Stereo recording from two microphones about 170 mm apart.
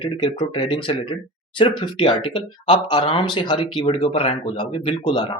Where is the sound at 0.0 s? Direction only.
30° left (ahead or behind).